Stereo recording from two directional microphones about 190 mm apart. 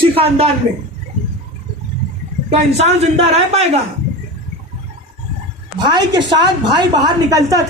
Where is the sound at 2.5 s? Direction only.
35° right (ahead or behind).